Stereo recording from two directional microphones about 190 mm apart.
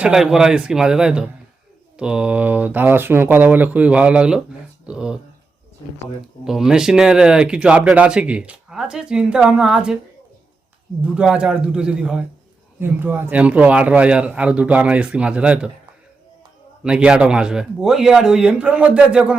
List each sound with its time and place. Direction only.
0.0 s a man's voice: 5° right (ahead or behind)
6.4 s speech: 5° right (ahead or behind)
11.0 s a man's voice: 5° right (ahead or behind)
16.8 s speech: 5° right (ahead or behind)